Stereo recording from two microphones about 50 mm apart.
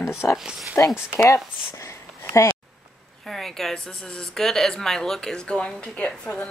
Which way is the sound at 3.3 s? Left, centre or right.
Centre.